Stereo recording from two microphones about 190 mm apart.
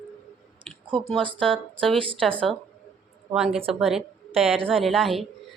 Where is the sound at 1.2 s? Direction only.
25° right (ahead or behind).